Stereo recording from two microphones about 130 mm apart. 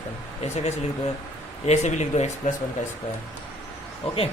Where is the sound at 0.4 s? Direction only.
60° left (ahead or behind).